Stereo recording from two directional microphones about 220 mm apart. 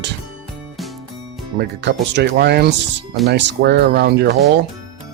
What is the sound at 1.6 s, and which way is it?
Speech, 50° right (ahead or behind).